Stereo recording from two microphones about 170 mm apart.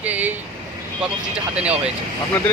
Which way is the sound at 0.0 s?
10° right (ahead or behind).